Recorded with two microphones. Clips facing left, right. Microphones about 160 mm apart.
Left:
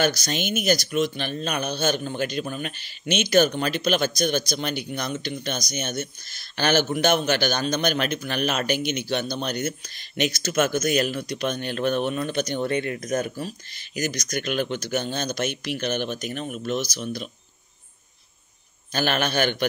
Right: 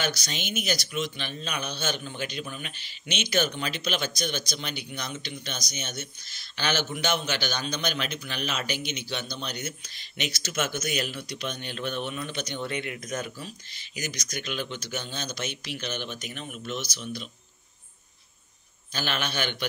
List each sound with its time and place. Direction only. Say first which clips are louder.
0.0 s speech: left 8 dB; 45° left (ahead or behind)
18.9 s speech: left 7 dB; 50° left (ahead or behind)